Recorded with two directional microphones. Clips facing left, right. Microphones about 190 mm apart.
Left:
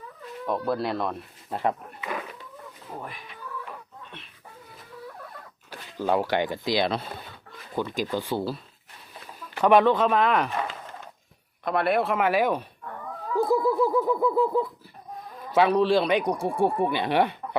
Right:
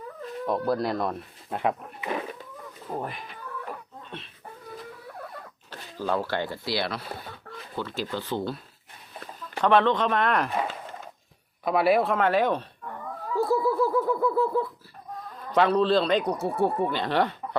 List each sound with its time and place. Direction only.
0.7 s speech: 5° left (ahead or behind)
5.7 s speech: 15° left (ahead or behind)
9.6 s speech: 10° left (ahead or behind)
10.5 s a sound: 15° right (ahead or behind)
11.6 s speech: 5° right (ahead or behind)
13.3 s a sound: 15° left (ahead or behind)
15.5 s speech: 10° left (ahead or behind)